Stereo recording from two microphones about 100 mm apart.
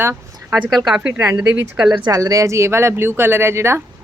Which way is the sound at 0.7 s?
5° right (ahead or behind).